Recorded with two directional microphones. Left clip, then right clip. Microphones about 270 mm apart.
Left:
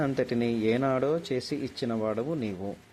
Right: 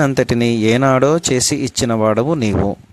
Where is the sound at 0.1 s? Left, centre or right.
Right.